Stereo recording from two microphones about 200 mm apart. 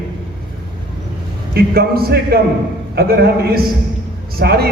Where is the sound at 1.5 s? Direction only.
50° right (ahead or behind).